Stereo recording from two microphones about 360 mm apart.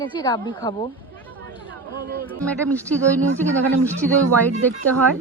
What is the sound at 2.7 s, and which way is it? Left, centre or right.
Speech, centre.